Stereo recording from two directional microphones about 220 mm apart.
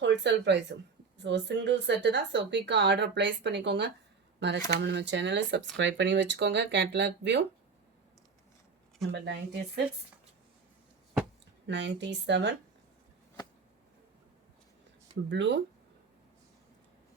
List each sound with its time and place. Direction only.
0.0 s speech: 55° right (ahead or behind)
9.1 s speech: 50° right (ahead or behind)
11.6 s speech: 55° right (ahead or behind)
15.3 s speech: 55° right (ahead or behind)